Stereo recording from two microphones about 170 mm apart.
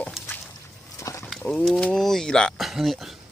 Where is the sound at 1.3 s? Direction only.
5° left (ahead or behind).